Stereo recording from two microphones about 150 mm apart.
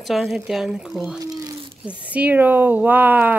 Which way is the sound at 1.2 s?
25° right (ahead or behind).